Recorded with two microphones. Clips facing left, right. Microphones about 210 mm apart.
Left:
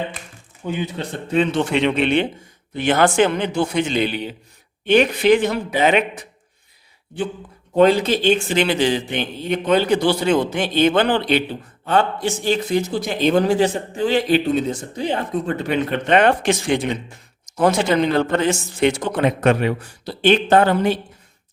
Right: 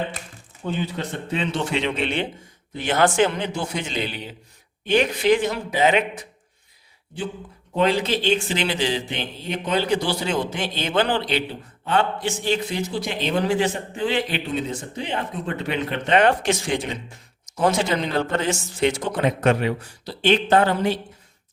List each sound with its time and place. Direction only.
0.7 s a man's voice: 15° left (ahead or behind)
1.3 s speech: 50° left (ahead or behind)
7.8 s speech: 45° left (ahead or behind)
11.9 s a man's voice: 40° left (ahead or behind)
16.1 s speech: 60° left (ahead or behind)